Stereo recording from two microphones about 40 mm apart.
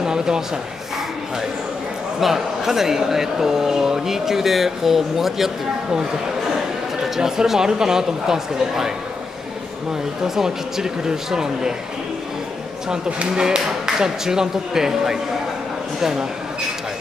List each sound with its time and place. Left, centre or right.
0.0 s speech: centre
2.1 s speech: centre
7.2 s speech: centre
10.2 s speech: centre
13.4 s speech: centre